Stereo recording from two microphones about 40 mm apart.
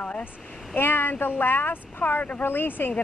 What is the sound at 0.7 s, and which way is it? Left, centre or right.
Speech, left.